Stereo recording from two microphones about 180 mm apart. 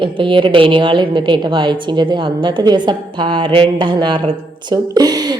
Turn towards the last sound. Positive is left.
turn(degrees=-20)  # may be behind; listen again after turning